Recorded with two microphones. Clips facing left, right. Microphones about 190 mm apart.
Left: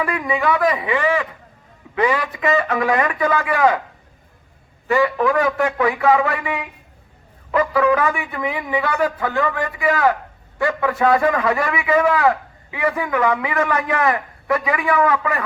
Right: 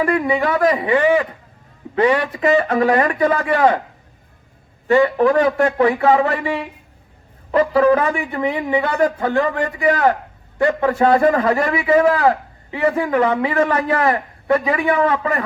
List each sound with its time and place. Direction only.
0.0 s a man's voice: 35° right (ahead or behind)
4.9 s a man's voice: 30° right (ahead or behind)